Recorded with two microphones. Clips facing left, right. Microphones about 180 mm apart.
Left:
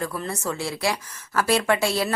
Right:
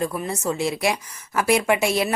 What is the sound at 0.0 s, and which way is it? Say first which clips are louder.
A woman's voice: right 3 dB; 15° right (ahead or behind).